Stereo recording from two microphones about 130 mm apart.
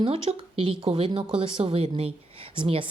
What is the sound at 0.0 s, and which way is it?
Speech, 45° right (ahead or behind).